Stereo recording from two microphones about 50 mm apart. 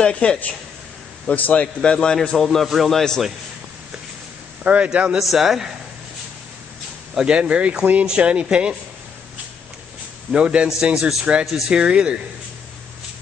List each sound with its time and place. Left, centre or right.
0.0 s a man's voice: centre
2.2 s a man's voice: centre
4.6 s speech: right
5.2 s a man's voice: centre
7.2 s speech: centre
10.3 s a man's voice: right; by 11.7 s centre
11.7 s speech: centre